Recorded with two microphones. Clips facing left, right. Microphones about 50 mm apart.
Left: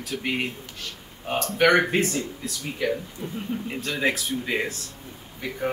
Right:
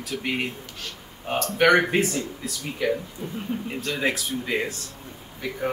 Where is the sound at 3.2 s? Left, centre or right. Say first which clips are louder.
Even; centre.